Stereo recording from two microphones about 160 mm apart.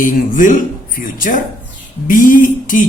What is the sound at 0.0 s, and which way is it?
A man's voice, 55° left (ahead or behind).